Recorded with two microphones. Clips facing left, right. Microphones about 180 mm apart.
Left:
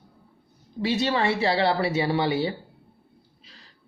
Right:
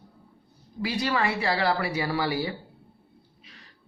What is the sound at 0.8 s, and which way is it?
Speech, 25° left (ahead or behind).